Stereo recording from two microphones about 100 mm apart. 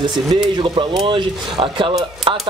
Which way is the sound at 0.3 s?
45° right (ahead or behind).